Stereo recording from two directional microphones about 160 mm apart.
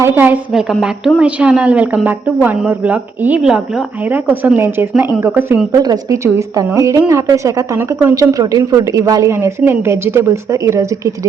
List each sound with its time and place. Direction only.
0.0 s a woman's voice: 10° right (ahead or behind)
5.7 s speech: 25° right (ahead or behind)